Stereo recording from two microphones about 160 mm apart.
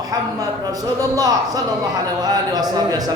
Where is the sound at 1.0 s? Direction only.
25° right (ahead or behind).